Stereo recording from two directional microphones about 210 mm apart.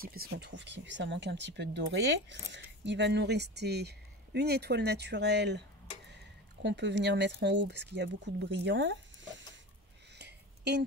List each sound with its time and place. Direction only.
0.0 s speech: 45° right (ahead or behind)
6.6 s speech: 55° right (ahead or behind)
10.1 s a sound: 55° right (ahead or behind)